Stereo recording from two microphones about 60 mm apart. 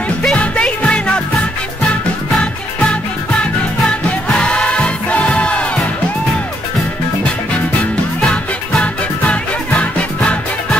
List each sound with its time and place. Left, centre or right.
0.4 s music: centre
8.2 s music: centre
8.8 s music: centre